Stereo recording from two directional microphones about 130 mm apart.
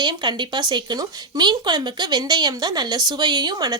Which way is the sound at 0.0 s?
35° right (ahead or behind).